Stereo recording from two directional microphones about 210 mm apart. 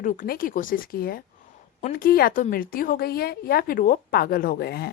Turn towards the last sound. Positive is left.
turn(degrees=50)  # may be behind; listen again after turning